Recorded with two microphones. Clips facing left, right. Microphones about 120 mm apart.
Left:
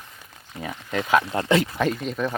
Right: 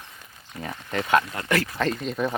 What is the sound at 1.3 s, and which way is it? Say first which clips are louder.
Speech: left 5 dB; 25° left (ahead or behind).